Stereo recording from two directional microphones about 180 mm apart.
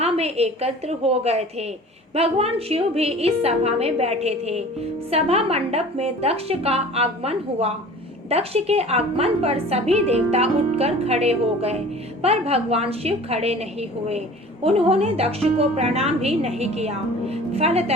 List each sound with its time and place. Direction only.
0.0 s a woman's voice: 35° right (ahead or behind)
14.6 s a woman's voice: 35° right (ahead or behind)